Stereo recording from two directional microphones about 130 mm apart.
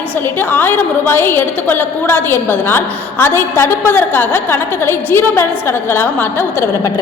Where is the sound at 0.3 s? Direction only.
15° left (ahead or behind).